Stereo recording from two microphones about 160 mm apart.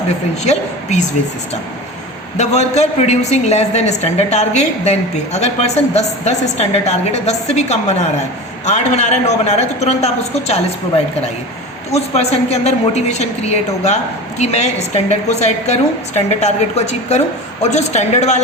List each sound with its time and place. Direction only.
0.4 s a woman's voice: 45° left (ahead or behind)
2.4 s a woman's voice: 45° left (ahead or behind)
11.9 s a woman's voice: 40° left (ahead or behind)